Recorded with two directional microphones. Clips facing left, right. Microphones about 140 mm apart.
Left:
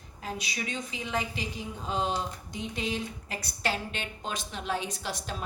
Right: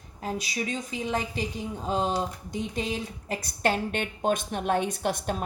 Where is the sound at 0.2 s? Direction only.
40° right (ahead or behind).